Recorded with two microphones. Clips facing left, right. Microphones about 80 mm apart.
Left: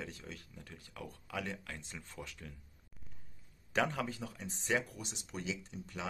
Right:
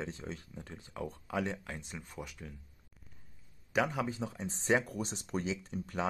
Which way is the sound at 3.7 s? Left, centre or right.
Centre.